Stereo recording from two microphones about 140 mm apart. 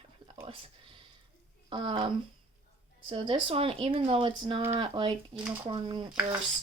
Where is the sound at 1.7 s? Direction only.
40° right (ahead or behind).